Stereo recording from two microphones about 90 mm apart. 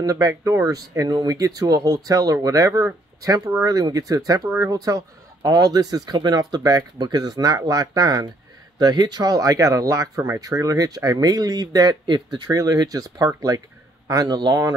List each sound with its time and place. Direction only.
0.0 s speech: 35° right (ahead or behind); by 12.4 s 55° right (ahead or behind)
12.4 s speech: 40° right (ahead or behind)